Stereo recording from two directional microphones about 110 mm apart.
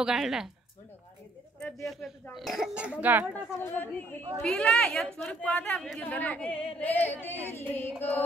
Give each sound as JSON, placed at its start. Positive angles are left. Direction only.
{"t": 0.0, "sound": "a man's voice", "side_deg": -5}
{"t": 1.6, "sound": "a man's voice", "side_deg": 0}
{"t": 3.3, "sound": "speech", "side_deg": 20}